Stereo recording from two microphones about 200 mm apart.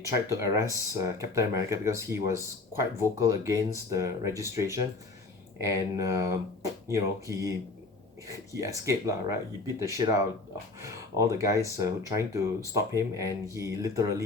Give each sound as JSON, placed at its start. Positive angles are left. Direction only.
{"t": 0.0, "sound": "speech", "side_deg": -15}